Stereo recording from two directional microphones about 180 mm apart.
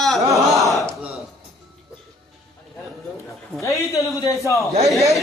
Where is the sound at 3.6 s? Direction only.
15° left (ahead or behind).